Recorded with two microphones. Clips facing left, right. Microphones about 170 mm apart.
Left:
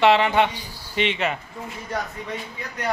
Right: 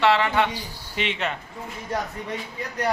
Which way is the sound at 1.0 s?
Centre (ahead or behind).